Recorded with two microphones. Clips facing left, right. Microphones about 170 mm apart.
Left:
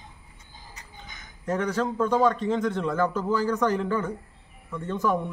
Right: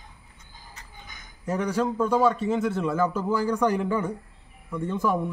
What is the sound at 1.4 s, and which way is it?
A man's voice, 10° right (ahead or behind).